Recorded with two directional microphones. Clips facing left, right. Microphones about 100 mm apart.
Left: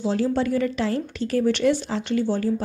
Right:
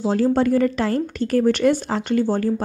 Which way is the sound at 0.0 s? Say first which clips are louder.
Right 4 dB; 45° right (ahead or behind).